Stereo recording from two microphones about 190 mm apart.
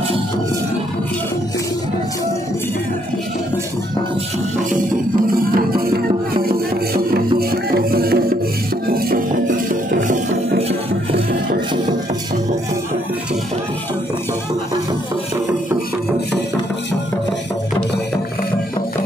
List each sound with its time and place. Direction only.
5.4 s music: 50° right (ahead or behind)
6.9 s music: 55° right (ahead or behind)